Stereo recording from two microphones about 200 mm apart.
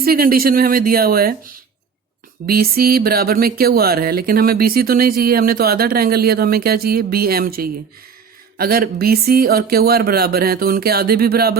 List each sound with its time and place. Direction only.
0.0 s music: 45° right (ahead or behind)